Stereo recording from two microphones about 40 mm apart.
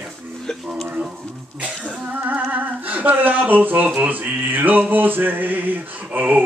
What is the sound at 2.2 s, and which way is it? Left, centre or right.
Humming, right.